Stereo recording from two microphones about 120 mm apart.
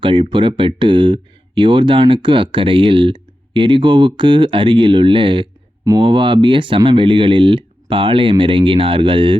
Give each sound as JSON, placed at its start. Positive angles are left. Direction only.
{"t": 0.0, "sound": "speech", "side_deg": -45}